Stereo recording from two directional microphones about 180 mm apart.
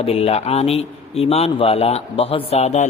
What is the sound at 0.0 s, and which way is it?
A man's voice, 35° left (ahead or behind).